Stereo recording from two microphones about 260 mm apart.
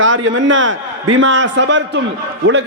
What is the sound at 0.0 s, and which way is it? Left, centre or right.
A man's voice, right.